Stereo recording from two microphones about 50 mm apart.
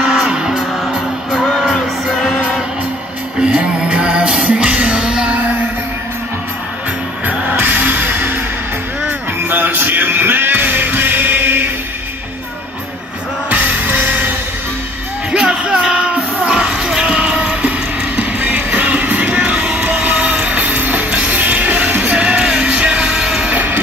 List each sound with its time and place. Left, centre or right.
0.2 s music: centre
3.3 s music: centre
7.2 s music: right
9.5 s music: right
15.3 s music: centre; by 22.1 s right
22.1 s music: centre
23.5 s train: right